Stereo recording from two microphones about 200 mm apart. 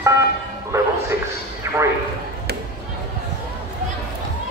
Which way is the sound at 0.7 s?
15° right (ahead or behind).